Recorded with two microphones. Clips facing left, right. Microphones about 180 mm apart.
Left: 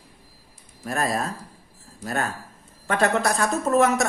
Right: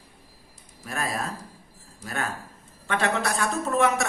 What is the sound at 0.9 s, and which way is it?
Speech, 40° left (ahead or behind).